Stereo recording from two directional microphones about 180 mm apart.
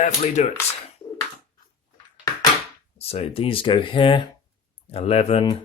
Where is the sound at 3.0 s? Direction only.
35° left (ahead or behind).